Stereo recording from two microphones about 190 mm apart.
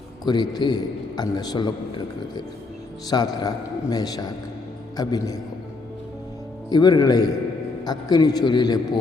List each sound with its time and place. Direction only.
0.3 s a man's voice: 20° left (ahead or behind)
6.7 s a man's voice: 20° left (ahead or behind)